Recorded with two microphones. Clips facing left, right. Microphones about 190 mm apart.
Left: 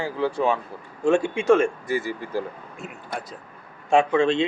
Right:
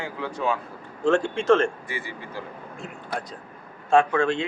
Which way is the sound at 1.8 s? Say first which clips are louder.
Left 8 dB; 40° left (ahead or behind).